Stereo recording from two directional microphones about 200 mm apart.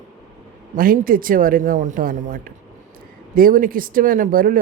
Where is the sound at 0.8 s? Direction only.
45° right (ahead or behind).